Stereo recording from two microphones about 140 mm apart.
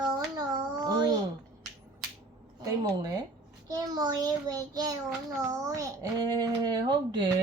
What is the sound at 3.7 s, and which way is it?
A child's voice, 30° right (ahead or behind).